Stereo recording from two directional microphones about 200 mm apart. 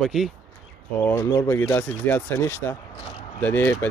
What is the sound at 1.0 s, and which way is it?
Speech, 15° left (ahead or behind).